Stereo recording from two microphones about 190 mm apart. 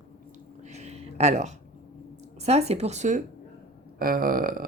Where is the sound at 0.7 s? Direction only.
35° right (ahead or behind).